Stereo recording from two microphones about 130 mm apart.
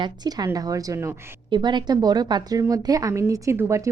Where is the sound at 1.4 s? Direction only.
35° right (ahead or behind).